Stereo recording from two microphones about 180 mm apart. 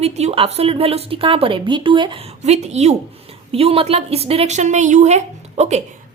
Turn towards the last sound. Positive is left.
turn(degrees=-40)  # may be behind; listen again after turning